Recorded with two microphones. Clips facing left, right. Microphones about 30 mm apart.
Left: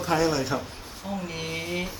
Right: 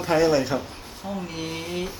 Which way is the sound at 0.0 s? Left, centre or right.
Centre.